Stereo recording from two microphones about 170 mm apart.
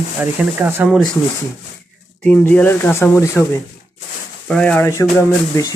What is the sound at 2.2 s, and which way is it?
Speech, 5° left (ahead or behind).